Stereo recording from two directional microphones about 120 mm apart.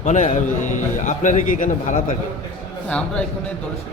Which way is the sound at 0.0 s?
80° left.